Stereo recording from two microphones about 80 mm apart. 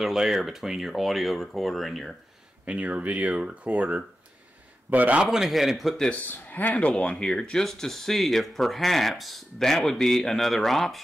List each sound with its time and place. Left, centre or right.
0.0 s speech: centre
2.6 s a man's voice: centre
5.2 s speech: centre
6.0 s speech: centre